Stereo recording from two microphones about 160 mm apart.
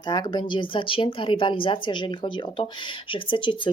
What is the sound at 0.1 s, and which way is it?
Speech, 25° left (ahead or behind).